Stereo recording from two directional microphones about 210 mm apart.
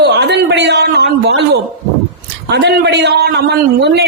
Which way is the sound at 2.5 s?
55° right (ahead or behind).